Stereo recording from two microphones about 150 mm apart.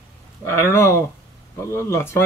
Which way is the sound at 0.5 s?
15° left (ahead or behind).